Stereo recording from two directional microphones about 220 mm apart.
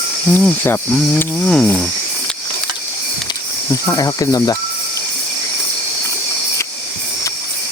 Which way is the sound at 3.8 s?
15° left (ahead or behind).